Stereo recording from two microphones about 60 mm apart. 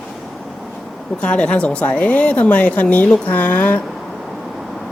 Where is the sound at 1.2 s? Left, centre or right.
Centre.